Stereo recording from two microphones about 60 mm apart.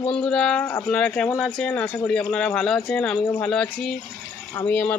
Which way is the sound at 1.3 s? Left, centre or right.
Centre.